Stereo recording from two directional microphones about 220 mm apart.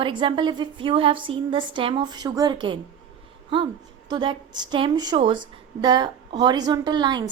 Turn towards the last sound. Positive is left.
turn(degrees=-20)  # may be behind; listen again after turning